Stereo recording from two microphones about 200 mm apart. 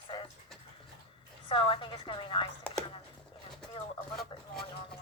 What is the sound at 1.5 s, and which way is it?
Speech, 25° left (ahead or behind).